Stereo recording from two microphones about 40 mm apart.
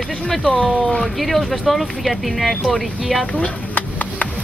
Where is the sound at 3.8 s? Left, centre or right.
Left.